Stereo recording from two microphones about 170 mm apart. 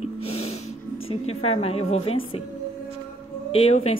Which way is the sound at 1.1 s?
35° left (ahead or behind).